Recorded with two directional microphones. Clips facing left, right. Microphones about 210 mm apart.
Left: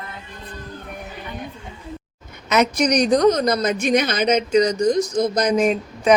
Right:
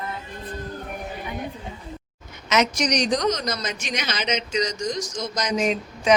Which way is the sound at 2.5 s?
55° left (ahead or behind).